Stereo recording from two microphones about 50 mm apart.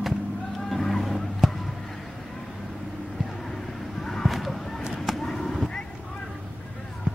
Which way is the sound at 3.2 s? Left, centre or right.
Centre.